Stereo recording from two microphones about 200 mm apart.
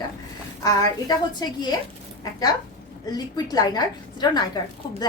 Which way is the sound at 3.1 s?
20° left (ahead or behind).